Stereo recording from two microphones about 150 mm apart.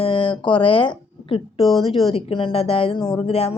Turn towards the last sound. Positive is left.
turn(degrees=40)  # may be behind; listen again after turning